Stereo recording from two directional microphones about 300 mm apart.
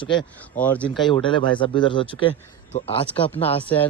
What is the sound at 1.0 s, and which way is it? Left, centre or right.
Speech, centre.